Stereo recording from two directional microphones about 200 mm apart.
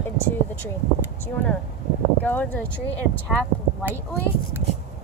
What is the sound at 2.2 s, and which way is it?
Speech, 10° left (ahead or behind).